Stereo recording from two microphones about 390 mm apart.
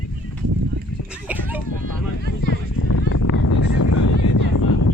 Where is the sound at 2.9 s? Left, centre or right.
Left.